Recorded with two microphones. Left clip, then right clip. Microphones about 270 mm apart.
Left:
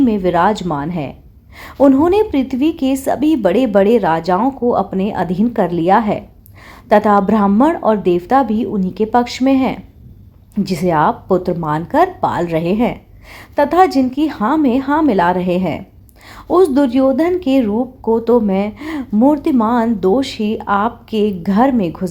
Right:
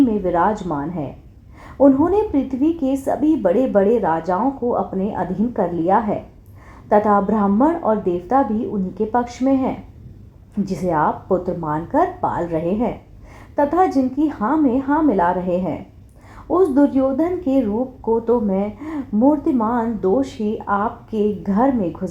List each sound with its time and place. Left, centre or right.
0.0 s a woman's voice: left
3.2 s speech: left
3.6 s a woman's voice: left
13.3 s a woman's voice: left
16.6 s a woman's voice: left
21.4 s a woman's voice: left